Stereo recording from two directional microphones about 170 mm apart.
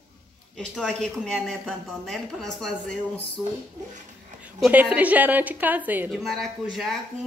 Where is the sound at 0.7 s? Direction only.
5° left (ahead or behind).